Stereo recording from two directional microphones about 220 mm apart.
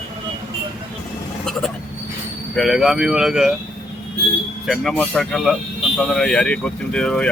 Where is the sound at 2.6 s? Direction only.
Centre (ahead or behind).